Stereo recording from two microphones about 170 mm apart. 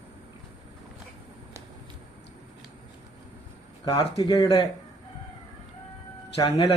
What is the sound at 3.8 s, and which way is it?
Speech, 35° left (ahead or behind).